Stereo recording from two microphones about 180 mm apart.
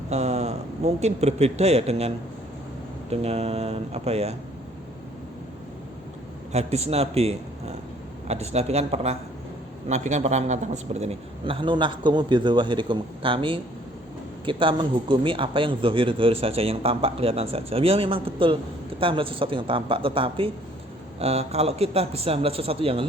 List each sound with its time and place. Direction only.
0.1 s a man's voice: 35° right (ahead or behind)
6.5 s a man's voice: 35° right (ahead or behind)